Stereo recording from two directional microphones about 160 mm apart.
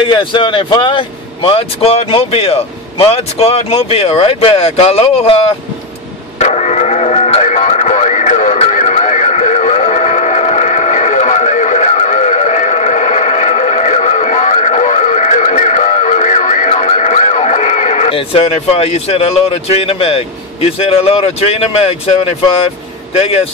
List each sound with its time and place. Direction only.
0.1 s speech: 30° left (ahead or behind)
6.4 s radio: 45° left (ahead or behind)